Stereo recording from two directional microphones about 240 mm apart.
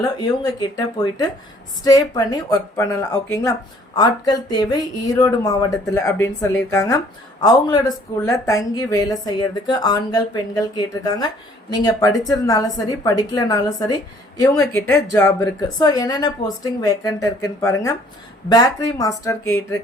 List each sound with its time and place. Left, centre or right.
0.0 s a woman's voice: centre
1.8 s a woman's voice: centre